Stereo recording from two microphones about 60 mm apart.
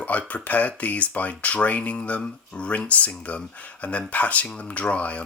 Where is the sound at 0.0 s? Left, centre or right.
Left.